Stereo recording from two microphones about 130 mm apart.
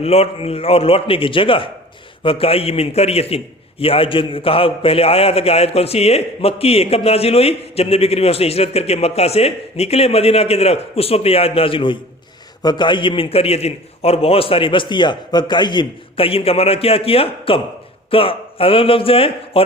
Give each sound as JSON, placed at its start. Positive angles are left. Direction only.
{"t": 0.0, "sound": "a man's voice", "side_deg": 50}